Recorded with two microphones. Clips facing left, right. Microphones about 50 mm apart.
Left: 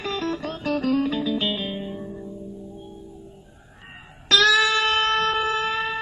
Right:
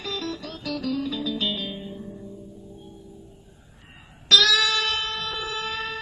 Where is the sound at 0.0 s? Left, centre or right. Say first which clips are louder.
Left 5 dB; left.